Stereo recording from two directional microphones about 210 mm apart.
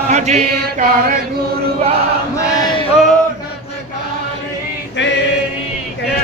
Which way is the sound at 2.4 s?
20° left (ahead or behind).